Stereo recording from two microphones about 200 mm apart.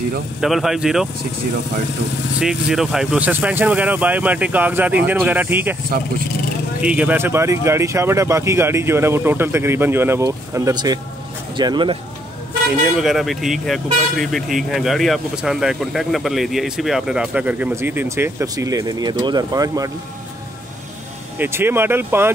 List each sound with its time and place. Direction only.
0.4 s speech: centre (ahead or behind)
2.4 s speech: centre (ahead or behind)
6.8 s speech: 5° right (ahead or behind); by 12.0 s 25° right (ahead or behind)
12.8 s speech: centre (ahead or behind); by 19.9 s 15° right (ahead or behind)
21.4 s speech: 10° right (ahead or behind)